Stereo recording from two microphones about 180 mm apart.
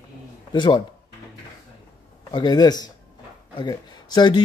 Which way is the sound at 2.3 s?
25° left (ahead or behind).